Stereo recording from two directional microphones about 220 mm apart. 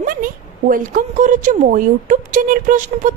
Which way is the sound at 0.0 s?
40° right (ahead or behind).